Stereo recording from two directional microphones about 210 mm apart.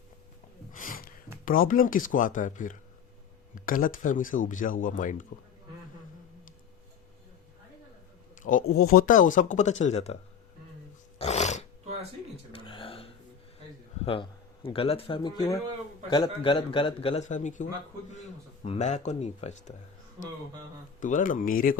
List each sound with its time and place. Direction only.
0.7 s a sound: 40° left (ahead or behind)
1.5 s speech: 40° left (ahead or behind)
8.4 s speech: 40° left (ahead or behind)
11.2 s roar: 30° left (ahead or behind)
12.5 s a sound: 25° left (ahead or behind)
14.0 s a man's voice: 25° left (ahead or behind)
21.0 s speech: 35° left (ahead or behind)